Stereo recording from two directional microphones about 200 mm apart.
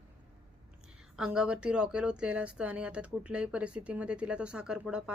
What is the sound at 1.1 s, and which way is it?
Speech, 5° right (ahead or behind).